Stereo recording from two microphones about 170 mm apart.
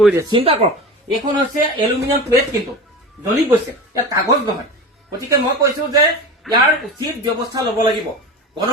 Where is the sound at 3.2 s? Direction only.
15° right (ahead or behind).